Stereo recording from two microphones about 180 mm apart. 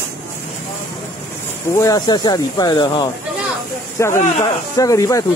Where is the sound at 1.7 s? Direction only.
20° left (ahead or behind).